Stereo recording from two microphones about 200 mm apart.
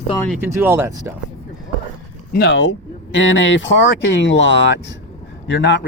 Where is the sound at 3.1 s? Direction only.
70° left (ahead or behind).